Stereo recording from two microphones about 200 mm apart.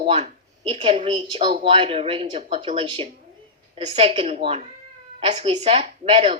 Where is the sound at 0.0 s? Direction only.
30° right (ahead or behind).